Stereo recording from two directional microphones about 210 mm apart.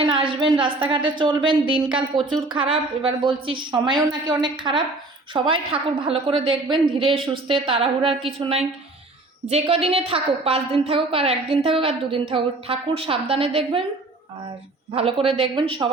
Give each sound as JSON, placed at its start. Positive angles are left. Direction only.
{"t": 0.0, "sound": "a woman's voice", "side_deg": -25}
{"t": 2.0, "sound": "speech", "side_deg": 0}
{"t": 2.5, "sound": "a woman's voice", "side_deg": -25}
{"t": 14.9, "sound": "a woman's voice", "side_deg": -25}